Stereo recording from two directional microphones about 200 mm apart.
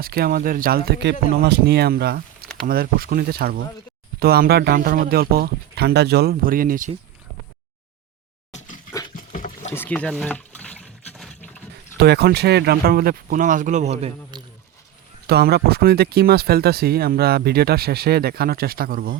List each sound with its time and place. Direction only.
0.0 s speech: 50° right (ahead or behind)
8.5 s a sound: 40° left (ahead or behind)
9.1 s boat: 40° left (ahead or behind)
9.7 s pour: 10° left (ahead or behind)
11.9 s speech: 55° right (ahead or behind); by 14.1 s 35° right (ahead or behind)
14.3 s speech: 20° right (ahead or behind)
15.3 s speech: 55° right (ahead or behind)